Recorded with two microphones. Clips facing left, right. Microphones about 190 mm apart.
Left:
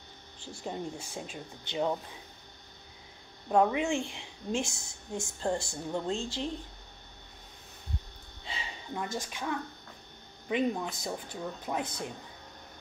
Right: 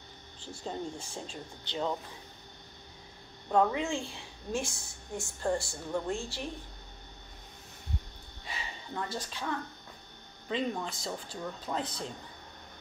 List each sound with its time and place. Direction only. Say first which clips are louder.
0.7 s speech: left 1 dB; 10° left (ahead or behind)
3.4 s a woman's voice: left 2 dB; 15° left (ahead or behind)
8.9 s speech: left 1 dB; 10° left (ahead or behind)